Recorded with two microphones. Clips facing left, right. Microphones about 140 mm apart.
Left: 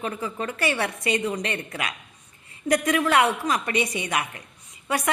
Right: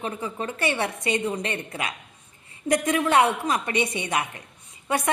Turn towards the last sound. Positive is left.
turn(degrees=-30)  # may be behind; listen again after turning